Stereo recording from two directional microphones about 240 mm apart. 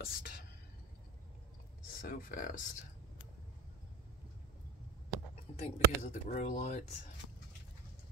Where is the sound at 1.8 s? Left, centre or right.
Left.